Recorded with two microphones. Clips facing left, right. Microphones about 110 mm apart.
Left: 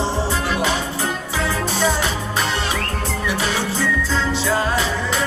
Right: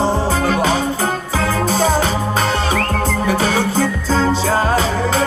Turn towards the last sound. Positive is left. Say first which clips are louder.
# right 5 dB
turn(degrees=-40)  # may be behind; listen again after turning